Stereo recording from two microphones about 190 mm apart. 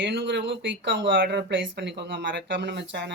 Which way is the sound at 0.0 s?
65° right (ahead or behind).